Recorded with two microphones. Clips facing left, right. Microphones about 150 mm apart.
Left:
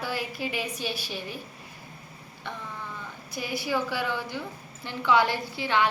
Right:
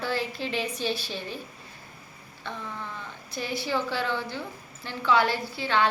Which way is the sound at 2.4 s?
15° left (ahead or behind).